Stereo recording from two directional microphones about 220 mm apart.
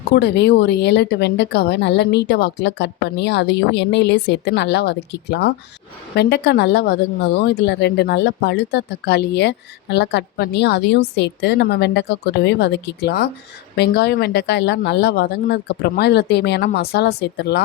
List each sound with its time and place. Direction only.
0.1 s speech: 50° left (ahead or behind)